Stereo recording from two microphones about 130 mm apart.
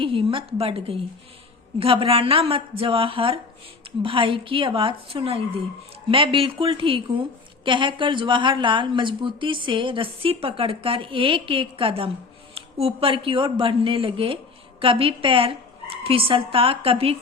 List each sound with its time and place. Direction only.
0.0 s a woman's voice: 45° right (ahead or behind)